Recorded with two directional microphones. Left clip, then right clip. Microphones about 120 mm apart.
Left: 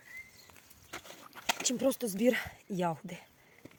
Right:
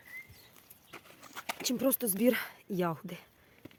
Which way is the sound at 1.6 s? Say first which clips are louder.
Right 2 dB; 40° right (ahead or behind).